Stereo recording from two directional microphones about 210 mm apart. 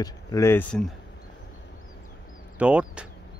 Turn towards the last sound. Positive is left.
turn(degrees=-5)  # may be behind; listen again after turning